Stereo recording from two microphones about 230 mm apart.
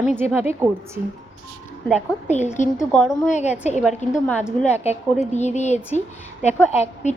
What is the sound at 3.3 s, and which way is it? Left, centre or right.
Speech, left.